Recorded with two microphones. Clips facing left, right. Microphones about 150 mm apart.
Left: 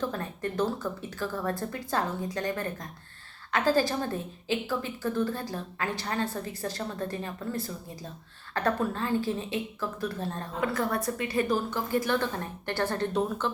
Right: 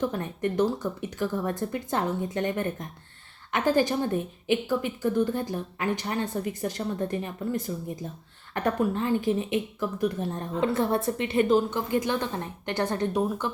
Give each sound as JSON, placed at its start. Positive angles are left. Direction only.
{"t": 0.0, "sound": "a woman's voice", "side_deg": -20}